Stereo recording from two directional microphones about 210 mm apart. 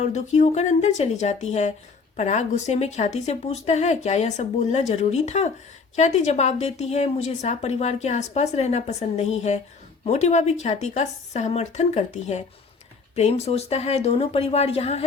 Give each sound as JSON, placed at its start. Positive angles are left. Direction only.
{"t": 0.1, "sound": "a woman's voice", "side_deg": 30}